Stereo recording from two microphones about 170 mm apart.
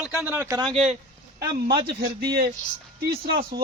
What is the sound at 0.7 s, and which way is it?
Speech, 40° right (ahead or behind).